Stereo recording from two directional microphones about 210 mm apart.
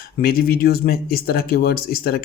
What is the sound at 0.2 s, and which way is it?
Speech, 45° left (ahead or behind).